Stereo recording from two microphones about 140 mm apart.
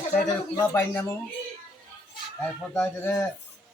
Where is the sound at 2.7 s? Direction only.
15° left (ahead or behind).